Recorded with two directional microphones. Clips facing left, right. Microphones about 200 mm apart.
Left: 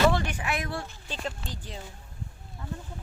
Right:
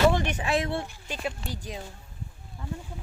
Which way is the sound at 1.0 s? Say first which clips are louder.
Right 2 dB; 10° right (ahead or behind).